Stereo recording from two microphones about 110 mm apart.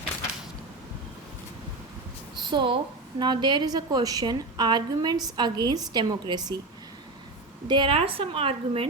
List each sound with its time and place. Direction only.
2.5 s a woman's voice: 45° right (ahead or behind)
7.7 s a woman's voice: 50° right (ahead or behind)